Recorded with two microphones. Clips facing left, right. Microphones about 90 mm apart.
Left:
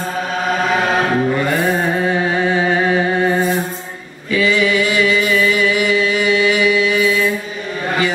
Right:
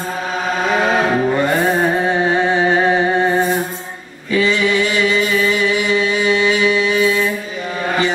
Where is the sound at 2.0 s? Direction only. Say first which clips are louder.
Right 1 dB; 25° right (ahead or behind).